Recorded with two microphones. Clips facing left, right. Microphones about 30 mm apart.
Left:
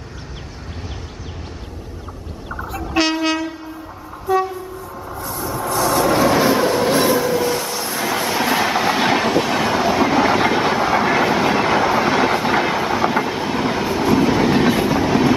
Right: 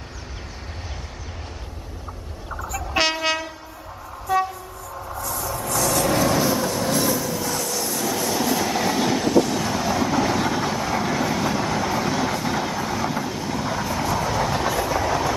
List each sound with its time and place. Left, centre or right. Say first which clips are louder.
2.6 s train: left 2 dB; left
2.9 s train: left 4 dB; centre
4.5 s train: left 6 dB; left
5.7 s vehicle: left 5 dB; left
6.4 s vehicle: left 7 dB; left